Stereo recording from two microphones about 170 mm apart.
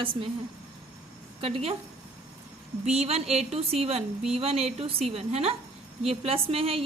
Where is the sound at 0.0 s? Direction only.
30° right (ahead or behind).